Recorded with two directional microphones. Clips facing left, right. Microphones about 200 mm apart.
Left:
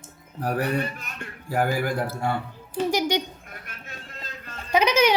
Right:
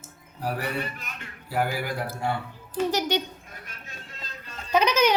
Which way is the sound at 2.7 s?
10° left (ahead or behind).